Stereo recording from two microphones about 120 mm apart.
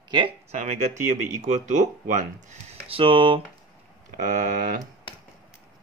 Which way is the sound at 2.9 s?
45° right (ahead or behind).